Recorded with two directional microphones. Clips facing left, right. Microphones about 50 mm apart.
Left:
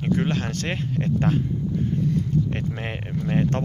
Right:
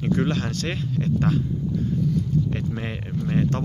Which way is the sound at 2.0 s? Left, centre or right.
Left.